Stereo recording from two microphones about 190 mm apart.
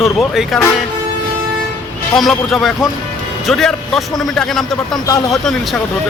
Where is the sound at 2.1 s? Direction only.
Centre (ahead or behind).